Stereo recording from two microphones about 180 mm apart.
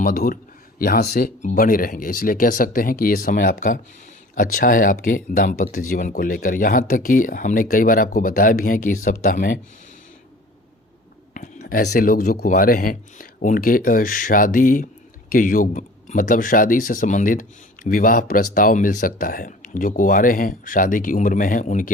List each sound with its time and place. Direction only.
0.0 s speech: 55° left (ahead or behind)
11.6 s speech: 60° left (ahead or behind)